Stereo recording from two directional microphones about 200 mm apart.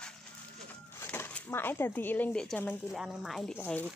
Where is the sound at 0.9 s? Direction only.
10° left (ahead or behind).